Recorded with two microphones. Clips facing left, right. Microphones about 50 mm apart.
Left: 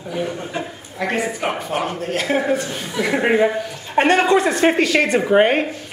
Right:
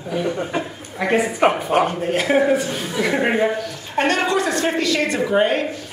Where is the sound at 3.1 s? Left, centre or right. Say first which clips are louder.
Left 3 dB; centre.